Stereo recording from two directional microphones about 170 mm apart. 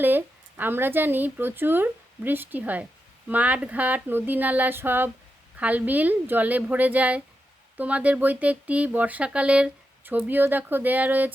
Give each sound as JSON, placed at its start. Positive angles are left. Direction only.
{"t": 0.0, "sound": "speech", "side_deg": -10}